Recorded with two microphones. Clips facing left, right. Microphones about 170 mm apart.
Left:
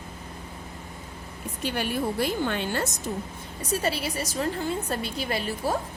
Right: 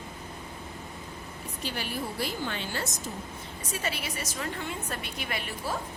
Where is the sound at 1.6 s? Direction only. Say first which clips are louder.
Left 7 dB; 55° left (ahead or behind).